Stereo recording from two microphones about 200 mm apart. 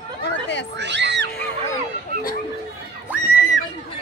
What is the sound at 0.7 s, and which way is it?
Speech, 60° right (ahead or behind).